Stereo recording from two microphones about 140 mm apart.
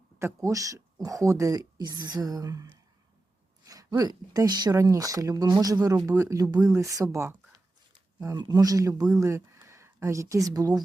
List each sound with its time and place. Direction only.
0.2 s speech: 20° right (ahead or behind)
3.7 s a sound: 25° right (ahead or behind)
4.4 s speech: 30° right (ahead or behind)